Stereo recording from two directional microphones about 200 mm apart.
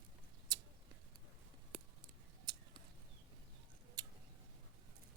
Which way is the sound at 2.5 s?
25° right (ahead or behind).